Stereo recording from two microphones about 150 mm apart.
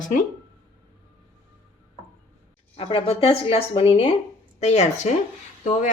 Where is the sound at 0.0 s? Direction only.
60° left (ahead or behind).